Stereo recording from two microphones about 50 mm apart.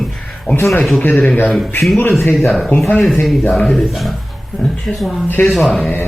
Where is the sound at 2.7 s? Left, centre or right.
Left.